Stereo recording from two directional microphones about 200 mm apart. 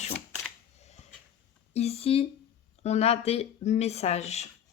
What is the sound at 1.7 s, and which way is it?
Speech, 30° left (ahead or behind).